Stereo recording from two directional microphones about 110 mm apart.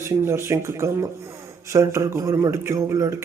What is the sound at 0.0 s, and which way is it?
A man's voice, 25° right (ahead or behind).